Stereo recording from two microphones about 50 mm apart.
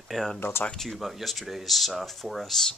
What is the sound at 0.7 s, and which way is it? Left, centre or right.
Speech, centre.